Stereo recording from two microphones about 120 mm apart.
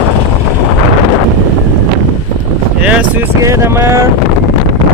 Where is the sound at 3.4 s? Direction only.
25° right (ahead or behind).